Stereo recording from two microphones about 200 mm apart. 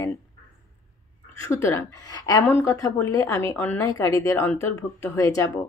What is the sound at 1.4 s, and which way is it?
A woman's voice, 15° left (ahead or behind).